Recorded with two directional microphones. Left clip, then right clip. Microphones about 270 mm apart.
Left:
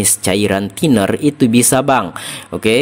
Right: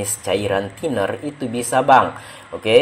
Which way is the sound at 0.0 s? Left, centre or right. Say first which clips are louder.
Left 5 dB; left.